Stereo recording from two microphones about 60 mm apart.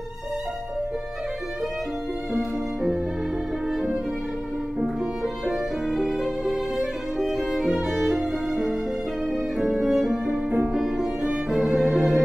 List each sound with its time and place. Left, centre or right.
2.3 s music: centre
5.2 s violin: centre
9.3 s music: centre